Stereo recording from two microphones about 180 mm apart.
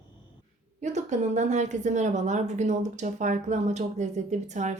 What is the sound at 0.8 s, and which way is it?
Speech, 40° right (ahead or behind).